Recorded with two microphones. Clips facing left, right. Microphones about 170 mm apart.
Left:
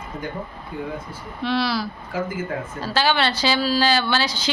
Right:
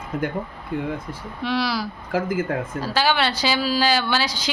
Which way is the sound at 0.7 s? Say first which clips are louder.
Right 4 dB; 80° right.